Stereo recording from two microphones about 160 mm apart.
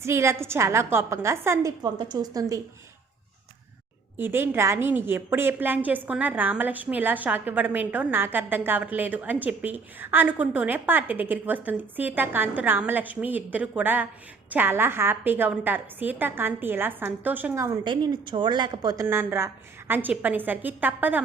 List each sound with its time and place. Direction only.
0.0 s a woman's voice: 15° right (ahead or behind)
4.2 s a woman's voice: 15° right (ahead or behind)
19.0 s a woman's voice: 15° right (ahead or behind)